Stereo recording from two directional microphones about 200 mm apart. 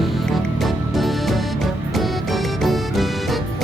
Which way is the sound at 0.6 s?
Centre (ahead or behind).